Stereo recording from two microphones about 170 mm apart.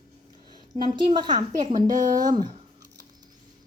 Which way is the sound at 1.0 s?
25° right (ahead or behind).